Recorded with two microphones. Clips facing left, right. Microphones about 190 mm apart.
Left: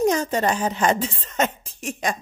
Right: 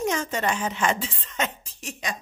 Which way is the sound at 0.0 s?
40° left (ahead or behind).